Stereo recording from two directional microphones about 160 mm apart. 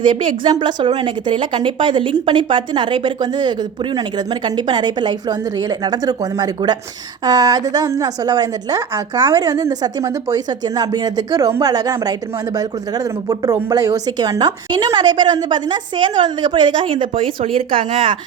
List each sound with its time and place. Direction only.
0.0 s a woman's voice: 30° right (ahead or behind)
13.2 s a woman's voice: 25° right (ahead or behind)